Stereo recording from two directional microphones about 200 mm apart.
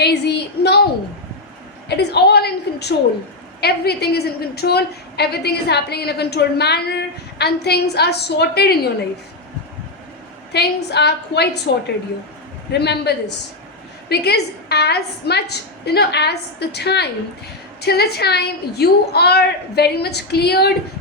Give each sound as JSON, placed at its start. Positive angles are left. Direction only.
{"t": 0.0, "sound": "a sound", "side_deg": 55}
{"t": 1.9, "sound": "a woman's voice", "side_deg": 55}
{"t": 10.5, "sound": "a woman's voice", "side_deg": 55}
{"t": 12.7, "sound": "a woman's voice", "side_deg": 55}